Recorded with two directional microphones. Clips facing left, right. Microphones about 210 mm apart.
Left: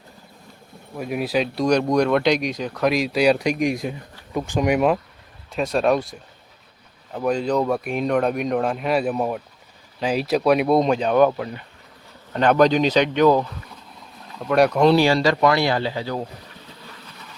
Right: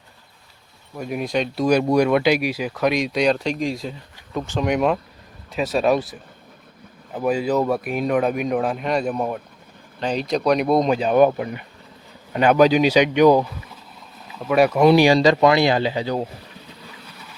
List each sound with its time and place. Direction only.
0.9 s speech: 5° left (ahead or behind); by 16.2 s 20° right (ahead or behind)